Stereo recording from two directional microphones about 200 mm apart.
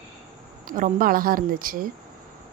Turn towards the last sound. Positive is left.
turn(degrees=-45)  # may be behind; listen again after turning